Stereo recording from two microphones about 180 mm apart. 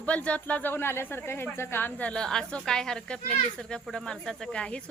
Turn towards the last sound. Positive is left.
turn(degrees=5)  # may be behind; listen again after turning